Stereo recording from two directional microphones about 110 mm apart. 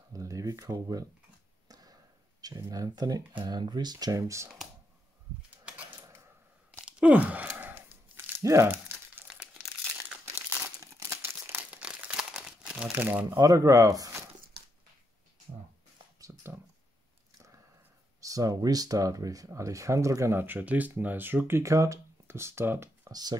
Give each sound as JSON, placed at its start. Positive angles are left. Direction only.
{"t": 0.1, "sound": "speech", "side_deg": -30}
{"t": 1.7, "sound": "a sound", "side_deg": -35}
{"t": 2.4, "sound": "speech", "side_deg": -35}
{"t": 5.9, "sound": "typewriter", "side_deg": -20}
{"t": 6.9, "sound": "tearing", "side_deg": -10}
{"t": 9.3, "sound": "crumpling", "side_deg": -5}
{"t": 9.9, "sound": "crumpling", "side_deg": -20}
{"t": 11.4, "sound": "crumpling", "side_deg": -15}
{"t": 13.4, "sound": "speech", "side_deg": -30}
{"t": 16.2, "sound": "a sound", "side_deg": -30}
{"t": 18.2, "sound": "speech", "side_deg": -30}